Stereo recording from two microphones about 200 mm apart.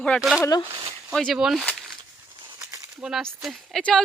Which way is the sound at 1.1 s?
Centre (ahead or behind).